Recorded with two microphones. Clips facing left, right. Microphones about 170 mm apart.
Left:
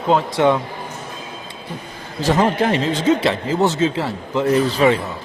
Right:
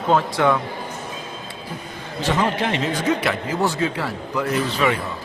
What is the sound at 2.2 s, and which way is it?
Speech, 45° left (ahead or behind).